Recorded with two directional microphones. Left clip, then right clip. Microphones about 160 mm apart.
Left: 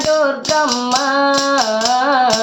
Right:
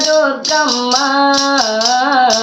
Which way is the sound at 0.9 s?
15° left (ahead or behind).